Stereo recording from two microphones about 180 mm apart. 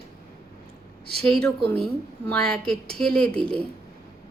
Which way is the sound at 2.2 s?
5° left (ahead or behind).